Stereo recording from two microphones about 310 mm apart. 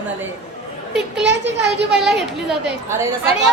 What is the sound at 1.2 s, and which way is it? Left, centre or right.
Speech, right.